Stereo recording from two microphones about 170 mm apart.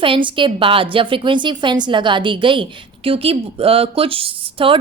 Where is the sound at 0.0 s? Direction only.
30° right (ahead or behind).